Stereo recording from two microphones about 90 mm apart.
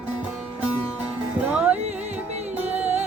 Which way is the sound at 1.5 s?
15° right (ahead or behind).